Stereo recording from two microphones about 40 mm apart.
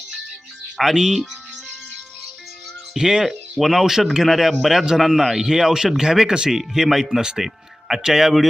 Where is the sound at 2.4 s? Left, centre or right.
Centre.